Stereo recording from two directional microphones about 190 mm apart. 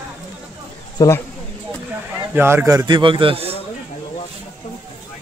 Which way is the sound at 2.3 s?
15° right (ahead or behind).